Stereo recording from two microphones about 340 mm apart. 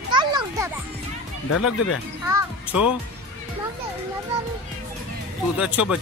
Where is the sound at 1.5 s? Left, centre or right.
Left.